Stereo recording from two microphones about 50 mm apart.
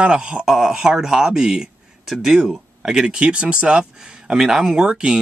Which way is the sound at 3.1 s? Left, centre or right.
Centre.